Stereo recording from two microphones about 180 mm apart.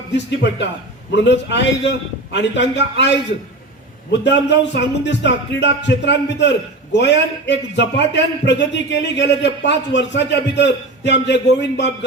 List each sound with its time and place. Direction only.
0.1 s a man's voice: 75° left (ahead or behind)
4.2 s a man's voice: 75° left (ahead or behind)